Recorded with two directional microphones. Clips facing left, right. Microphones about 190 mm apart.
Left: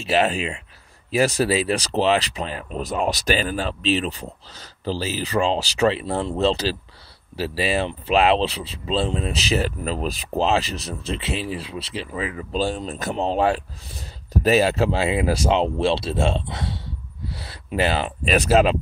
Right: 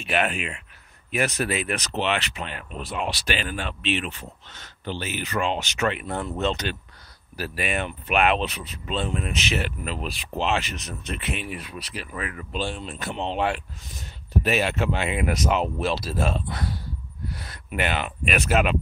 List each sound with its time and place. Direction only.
0.0 s speech: 30° left (ahead or behind)
12.5 s speech: 40° left (ahead or behind)